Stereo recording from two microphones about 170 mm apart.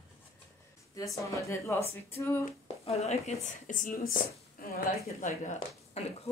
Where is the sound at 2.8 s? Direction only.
40° left (ahead or behind); by 5.3 s 55° left (ahead or behind).